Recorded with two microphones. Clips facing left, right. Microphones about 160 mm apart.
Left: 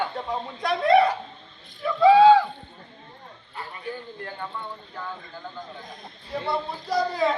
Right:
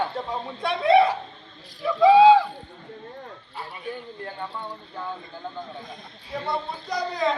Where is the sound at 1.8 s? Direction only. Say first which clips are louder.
Even; 10° right (ahead or behind).